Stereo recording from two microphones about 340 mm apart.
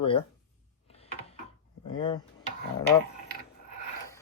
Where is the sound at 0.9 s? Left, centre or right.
Centre.